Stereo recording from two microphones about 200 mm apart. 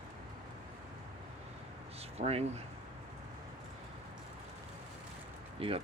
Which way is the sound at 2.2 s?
30° right (ahead or behind).